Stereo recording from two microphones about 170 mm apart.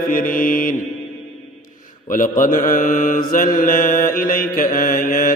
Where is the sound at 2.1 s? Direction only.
50° left (ahead or behind).